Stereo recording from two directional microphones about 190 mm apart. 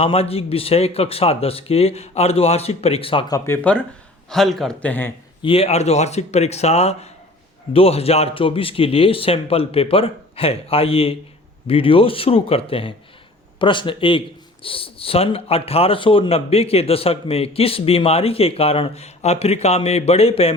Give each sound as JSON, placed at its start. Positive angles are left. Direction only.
{"t": 0.0, "sound": "a man's voice", "side_deg": 30}
{"t": 5.4, "sound": "a man's voice", "side_deg": 30}